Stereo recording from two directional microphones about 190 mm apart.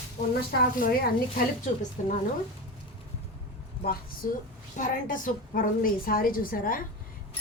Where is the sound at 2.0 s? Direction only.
40° left (ahead or behind).